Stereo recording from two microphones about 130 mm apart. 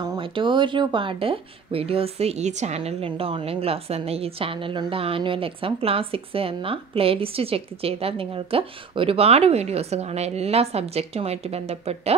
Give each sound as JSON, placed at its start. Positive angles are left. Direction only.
{"t": 0.1, "sound": "speech", "side_deg": -40}